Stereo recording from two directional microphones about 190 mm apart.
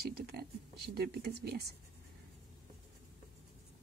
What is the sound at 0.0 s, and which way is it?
Speech, 55° right (ahead or behind).